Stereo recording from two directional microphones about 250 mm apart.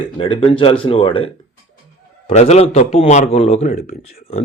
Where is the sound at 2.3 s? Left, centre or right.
Left.